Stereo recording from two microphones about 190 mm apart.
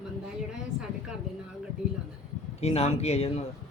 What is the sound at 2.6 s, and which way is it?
Speech, 35° left (ahead or behind).